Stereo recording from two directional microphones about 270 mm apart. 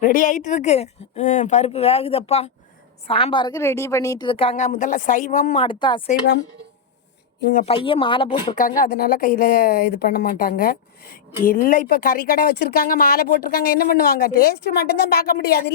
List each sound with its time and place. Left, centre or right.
0.0 s a woman's voice: left
5.6 s speech: centre
6.1 s speech: left
7.5 s a woman's voice: left
8.8 s speech: left